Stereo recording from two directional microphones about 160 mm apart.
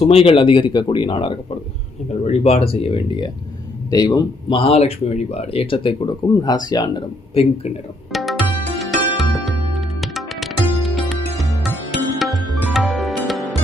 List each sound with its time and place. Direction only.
0.0 s speech: 35° left (ahead or behind)
2.2 s speech: 40° left (ahead or behind)
8.1 s tabla: centre (ahead or behind)
8.8 s music: centre (ahead or behind)